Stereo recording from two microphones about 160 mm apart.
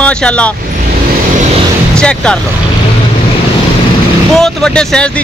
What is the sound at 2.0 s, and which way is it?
Speech, 5° left (ahead or behind).